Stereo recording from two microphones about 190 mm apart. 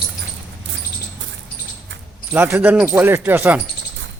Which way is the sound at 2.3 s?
10° right (ahead or behind).